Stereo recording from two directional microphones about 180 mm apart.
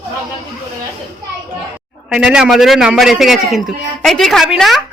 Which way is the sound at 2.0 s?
5° right (ahead or behind).